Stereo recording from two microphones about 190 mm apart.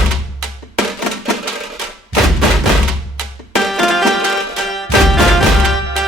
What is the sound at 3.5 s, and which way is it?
Music, centre (ahead or behind).